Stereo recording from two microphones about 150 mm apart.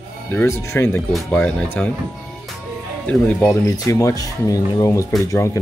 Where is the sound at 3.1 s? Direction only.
10° left (ahead or behind).